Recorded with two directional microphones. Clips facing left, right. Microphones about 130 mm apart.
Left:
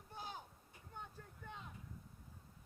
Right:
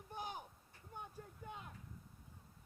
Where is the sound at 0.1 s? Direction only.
15° right (ahead or behind).